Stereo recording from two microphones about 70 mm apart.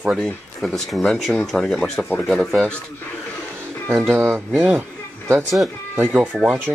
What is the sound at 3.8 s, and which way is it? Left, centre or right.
Speech, right.